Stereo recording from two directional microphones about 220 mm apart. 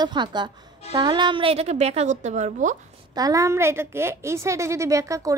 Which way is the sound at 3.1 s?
15° right (ahead or behind).